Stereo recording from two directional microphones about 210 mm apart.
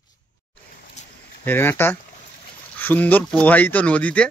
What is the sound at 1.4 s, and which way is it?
Speech, 10° left (ahead or behind).